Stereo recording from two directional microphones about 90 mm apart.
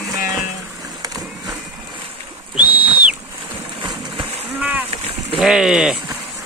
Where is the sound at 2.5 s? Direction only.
20° right (ahead or behind).